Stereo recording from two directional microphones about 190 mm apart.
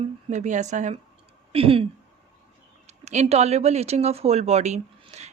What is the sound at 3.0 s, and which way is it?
Speech, 35° right (ahead or behind).